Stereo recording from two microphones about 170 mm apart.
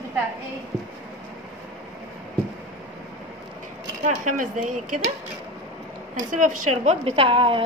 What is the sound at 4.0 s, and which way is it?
Speech, 45° right (ahead or behind).